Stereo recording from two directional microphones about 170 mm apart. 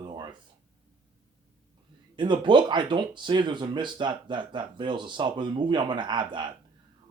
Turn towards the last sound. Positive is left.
turn(degrees=-25)  # may be behind; listen again after turning